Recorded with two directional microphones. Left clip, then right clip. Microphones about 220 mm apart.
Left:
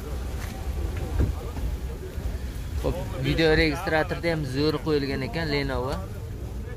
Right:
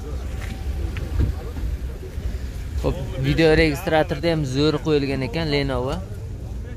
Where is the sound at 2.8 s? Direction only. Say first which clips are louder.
Right 3 dB; 15° right (ahead or behind).